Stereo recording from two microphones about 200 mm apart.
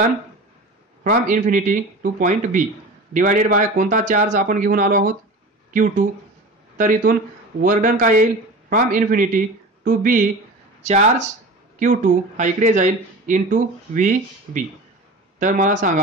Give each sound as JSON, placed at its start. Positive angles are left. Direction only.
{"t": 1.0, "sound": "speech", "side_deg": -45}